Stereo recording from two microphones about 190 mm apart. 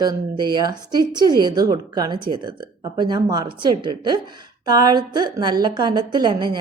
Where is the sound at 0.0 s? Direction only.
25° right (ahead or behind).